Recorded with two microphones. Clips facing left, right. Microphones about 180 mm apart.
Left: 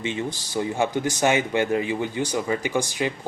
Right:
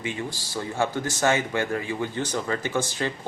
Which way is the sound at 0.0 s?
20° left (ahead or behind).